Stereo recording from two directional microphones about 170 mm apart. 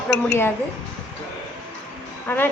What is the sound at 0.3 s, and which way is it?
Speech, 15° left (ahead or behind).